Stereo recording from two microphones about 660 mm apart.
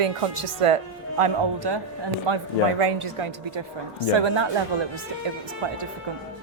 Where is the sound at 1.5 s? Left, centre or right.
Right.